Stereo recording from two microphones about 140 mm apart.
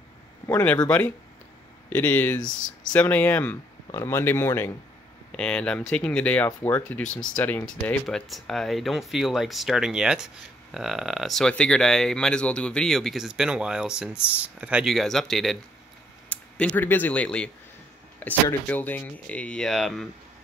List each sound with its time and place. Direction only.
0.5 s speech: 10° left (ahead or behind)